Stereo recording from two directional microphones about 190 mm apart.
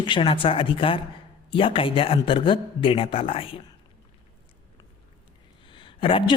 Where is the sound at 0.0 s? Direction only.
25° left (ahead or behind).